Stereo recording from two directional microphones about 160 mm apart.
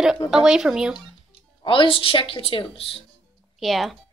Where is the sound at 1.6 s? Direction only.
35° left (ahead or behind).